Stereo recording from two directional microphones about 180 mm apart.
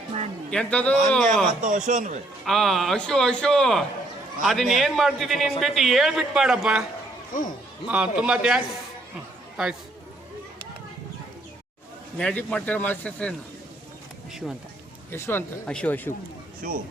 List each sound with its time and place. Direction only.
0.5 s a man's voice: 5° left (ahead or behind)
1.6 s a man's voice: 45° right (ahead or behind)
2.4 s a man's voice: centre (ahead or behind)
7.9 s a man's voice: 5° right (ahead or behind)
12.1 s a man's voice: 5° left (ahead or behind)
15.1 s a man's voice: 15° left (ahead or behind)
16.6 s speech: 50° right (ahead or behind)